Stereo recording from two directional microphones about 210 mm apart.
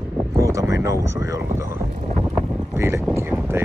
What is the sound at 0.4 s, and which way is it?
Speech, 15° right (ahead or behind).